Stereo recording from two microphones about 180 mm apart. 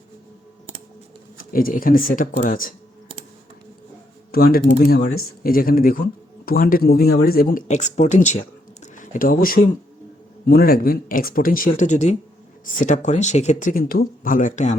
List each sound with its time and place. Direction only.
1.4 s speech: 55° left (ahead or behind)
4.3 s speech: 55° left (ahead or behind)
7.7 s speech: 40° left (ahead or behind)